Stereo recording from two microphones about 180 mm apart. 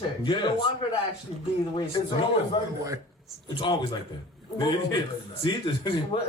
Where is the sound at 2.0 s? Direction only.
30° left (ahead or behind).